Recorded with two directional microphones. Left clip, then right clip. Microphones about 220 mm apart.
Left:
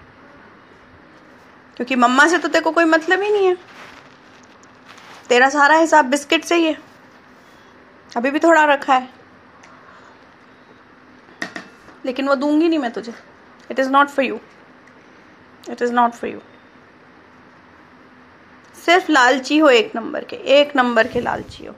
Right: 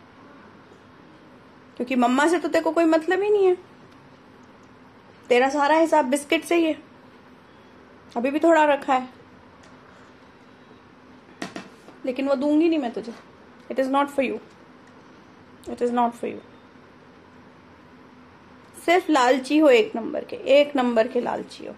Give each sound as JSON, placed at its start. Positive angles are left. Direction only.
{"t": 1.8, "sound": "a woman's voice", "side_deg": 5}
{"t": 5.3, "sound": "a woman's voice", "side_deg": 5}
{"t": 8.1, "sound": "a woman's voice", "side_deg": 5}
{"t": 12.0, "sound": "a woman's voice", "side_deg": 5}
{"t": 15.6, "sound": "a woman's voice", "side_deg": 5}
{"t": 18.9, "sound": "a woman's voice", "side_deg": 5}